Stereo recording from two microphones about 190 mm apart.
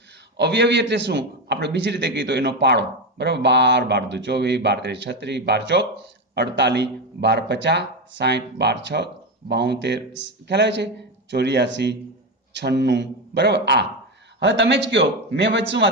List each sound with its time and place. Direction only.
0.3 s a man's voice: 65° right (ahead or behind)